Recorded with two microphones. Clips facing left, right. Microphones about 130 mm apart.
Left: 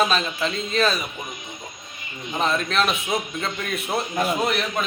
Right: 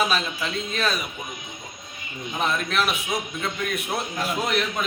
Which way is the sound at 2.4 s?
5° right (ahead or behind).